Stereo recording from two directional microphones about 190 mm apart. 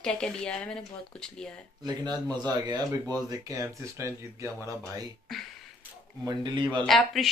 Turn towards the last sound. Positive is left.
turn(degrees=0)  # may be behind; listen again after turning